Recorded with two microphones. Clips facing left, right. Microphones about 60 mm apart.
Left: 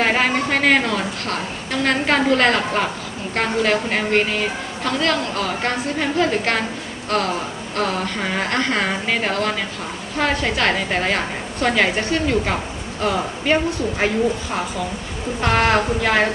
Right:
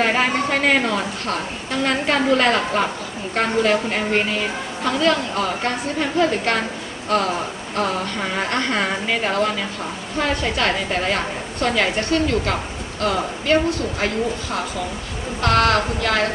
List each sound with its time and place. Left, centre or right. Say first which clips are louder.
0.0 s a woman's voice: even; centre
15.4 s a woman's voice: even; centre